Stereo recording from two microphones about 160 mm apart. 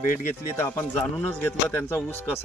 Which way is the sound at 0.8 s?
10° left (ahead or behind).